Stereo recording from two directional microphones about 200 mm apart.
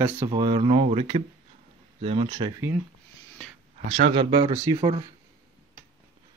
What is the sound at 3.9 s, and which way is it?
Speech, 30° right (ahead or behind).